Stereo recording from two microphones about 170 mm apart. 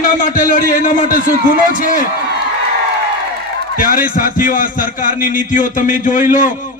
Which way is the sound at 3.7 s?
55° left (ahead or behind).